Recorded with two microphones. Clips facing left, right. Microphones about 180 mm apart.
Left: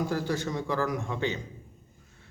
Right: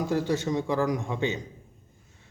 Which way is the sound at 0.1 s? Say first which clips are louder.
Right 4 dB; 20° right (ahead or behind).